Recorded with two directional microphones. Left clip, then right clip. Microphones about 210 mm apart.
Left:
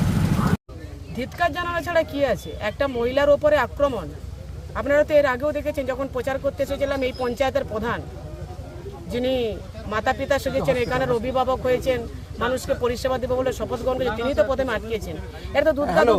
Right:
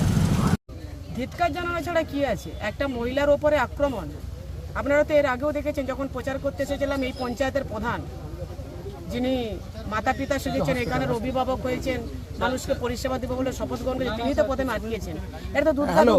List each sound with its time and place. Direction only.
1.2 s speech: 10° left (ahead or behind)
9.1 s speech: 10° left (ahead or behind)